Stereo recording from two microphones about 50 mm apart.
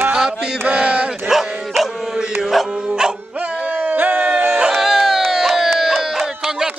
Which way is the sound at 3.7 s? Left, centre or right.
Right.